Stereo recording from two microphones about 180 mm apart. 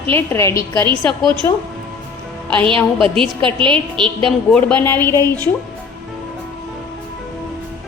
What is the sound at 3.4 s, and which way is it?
Speech, 25° right (ahead or behind).